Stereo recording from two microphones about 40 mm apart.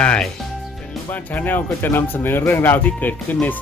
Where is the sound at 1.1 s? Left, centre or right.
Left.